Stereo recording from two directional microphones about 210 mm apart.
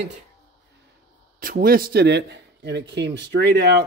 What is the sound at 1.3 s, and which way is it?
Speech, 40° right (ahead or behind).